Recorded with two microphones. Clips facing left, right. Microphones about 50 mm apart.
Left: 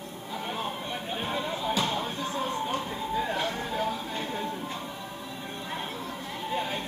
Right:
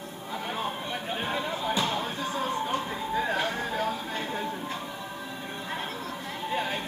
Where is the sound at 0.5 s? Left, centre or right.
Centre.